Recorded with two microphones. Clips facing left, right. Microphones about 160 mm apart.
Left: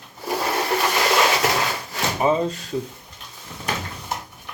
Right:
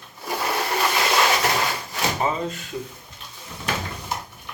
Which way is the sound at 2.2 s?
15° left (ahead or behind).